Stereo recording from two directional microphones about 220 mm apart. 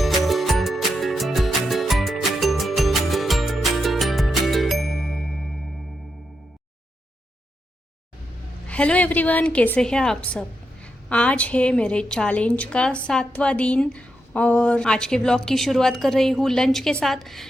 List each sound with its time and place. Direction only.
0.0 s music: centre (ahead or behind)
8.6 s a woman's voice: 5° left (ahead or behind)